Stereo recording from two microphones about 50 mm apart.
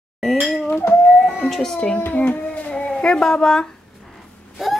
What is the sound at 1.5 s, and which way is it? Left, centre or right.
Speech, centre.